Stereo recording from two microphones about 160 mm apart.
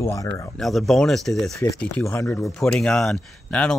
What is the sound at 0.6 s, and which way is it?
Speech, centre (ahead or behind).